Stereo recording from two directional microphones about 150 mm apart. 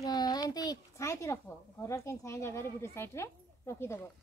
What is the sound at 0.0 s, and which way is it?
A woman's voice, 25° left (ahead or behind).